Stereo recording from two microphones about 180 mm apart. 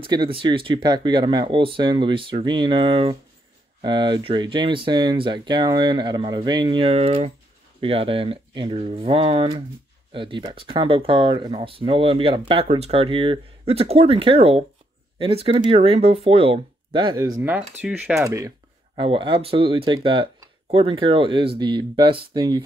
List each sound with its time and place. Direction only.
0.0 s speech: 25° right (ahead or behind)
17.4 s speech: 10° right (ahead or behind)
18.9 s speech: 30° right (ahead or behind)